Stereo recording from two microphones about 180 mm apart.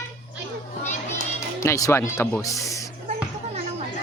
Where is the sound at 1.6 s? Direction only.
15° left (ahead or behind).